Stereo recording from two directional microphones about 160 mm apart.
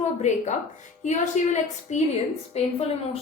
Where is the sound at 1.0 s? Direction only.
50° left (ahead or behind).